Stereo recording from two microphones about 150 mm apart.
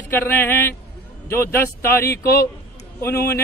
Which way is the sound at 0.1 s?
15° left (ahead or behind).